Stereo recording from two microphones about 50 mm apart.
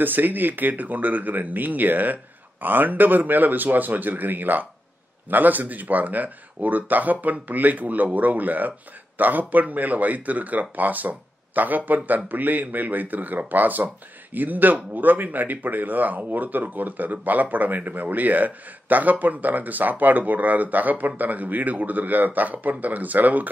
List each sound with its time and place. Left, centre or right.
0.0 s speech: right